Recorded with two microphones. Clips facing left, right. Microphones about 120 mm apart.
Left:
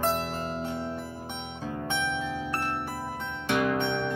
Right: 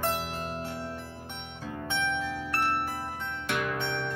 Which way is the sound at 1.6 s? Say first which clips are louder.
Left 1 dB; 20° left (ahead or behind).